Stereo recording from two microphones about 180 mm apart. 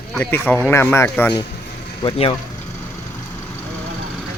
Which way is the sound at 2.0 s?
30° left (ahead or behind).